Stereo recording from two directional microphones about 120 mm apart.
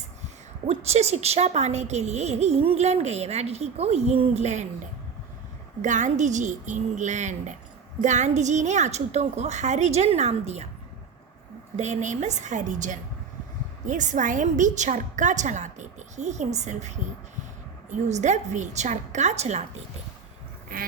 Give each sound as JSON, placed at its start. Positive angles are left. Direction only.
{"t": 0.7, "sound": "a woman's voice", "side_deg": -60}
{"t": 5.8, "sound": "a woman's voice", "side_deg": -90}
{"t": 11.8, "sound": "a woman's voice", "side_deg": -80}